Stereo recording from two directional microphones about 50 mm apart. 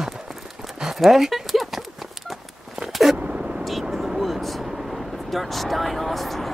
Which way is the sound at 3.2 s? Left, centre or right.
Centre.